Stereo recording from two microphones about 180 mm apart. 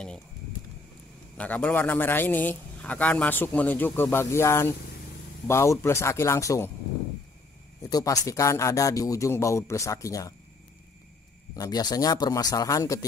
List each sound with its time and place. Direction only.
1.4 s a man's voice: 10° left (ahead or behind)
7.9 s a man's voice: 20° left (ahead or behind)
11.5 s a man's voice: 20° left (ahead or behind)